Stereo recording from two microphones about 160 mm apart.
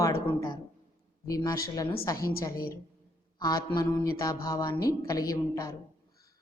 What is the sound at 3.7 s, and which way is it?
Speech, 20° left (ahead or behind).